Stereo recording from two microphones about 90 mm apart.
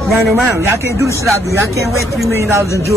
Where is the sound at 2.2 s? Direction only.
35° right (ahead or behind).